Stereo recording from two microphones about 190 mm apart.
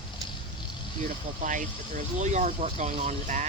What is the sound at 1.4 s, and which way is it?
Speech, 40° right (ahead or behind).